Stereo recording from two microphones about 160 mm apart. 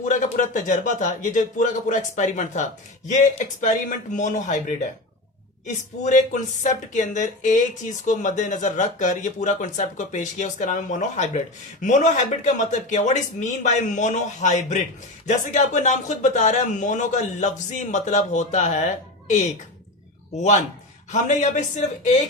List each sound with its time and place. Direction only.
0.0 s speech: 55° left (ahead or behind)
20.3 s speech: 45° left (ahead or behind)